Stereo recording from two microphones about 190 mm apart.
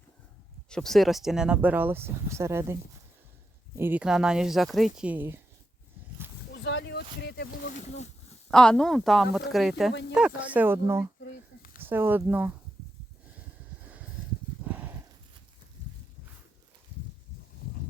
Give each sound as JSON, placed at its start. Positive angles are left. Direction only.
{"t": 0.7, "sound": "speech", "side_deg": 5}
{"t": 3.8, "sound": "speech", "side_deg": -10}
{"t": 6.7, "sound": "speech", "side_deg": 65}
{"t": 7.8, "sound": "speech", "side_deg": 35}
{"t": 8.4, "sound": "speech", "side_deg": 5}
{"t": 11.2, "sound": "a sound", "side_deg": 50}
{"t": 11.8, "sound": "speech", "side_deg": -10}